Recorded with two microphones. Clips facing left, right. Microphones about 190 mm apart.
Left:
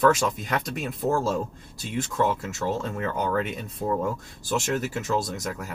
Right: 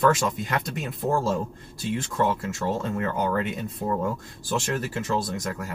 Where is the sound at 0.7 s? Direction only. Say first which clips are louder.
Left 1 dB; centre (ahead or behind).